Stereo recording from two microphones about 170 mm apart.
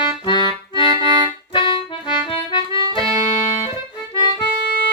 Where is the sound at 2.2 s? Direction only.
30° left (ahead or behind).